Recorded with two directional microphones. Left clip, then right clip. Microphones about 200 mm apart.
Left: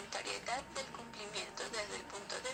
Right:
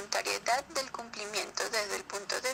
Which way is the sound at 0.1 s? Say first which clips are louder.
Right 10 dB; 45° right (ahead or behind).